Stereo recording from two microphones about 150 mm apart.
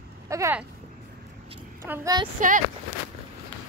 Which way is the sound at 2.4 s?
60° right (ahead or behind).